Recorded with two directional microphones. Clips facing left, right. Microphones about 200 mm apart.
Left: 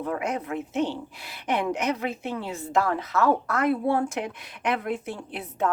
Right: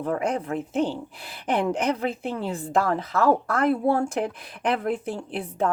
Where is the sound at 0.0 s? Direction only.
30° right (ahead or behind).